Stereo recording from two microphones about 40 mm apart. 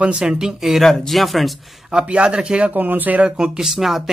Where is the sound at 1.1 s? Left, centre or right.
Centre.